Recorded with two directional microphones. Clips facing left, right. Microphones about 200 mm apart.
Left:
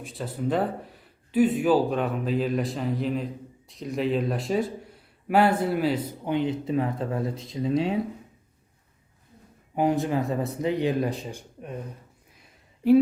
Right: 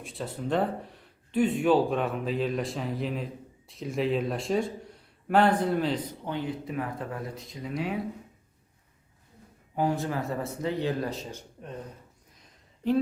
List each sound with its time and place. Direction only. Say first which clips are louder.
0.0 s speech: left 4 dB; centre (ahead or behind); by 7.9 s 25° left (ahead or behind)
9.7 s speech: left 4 dB; 15° left (ahead or behind)